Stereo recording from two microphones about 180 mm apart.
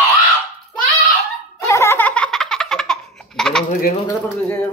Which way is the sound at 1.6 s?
15° left (ahead or behind).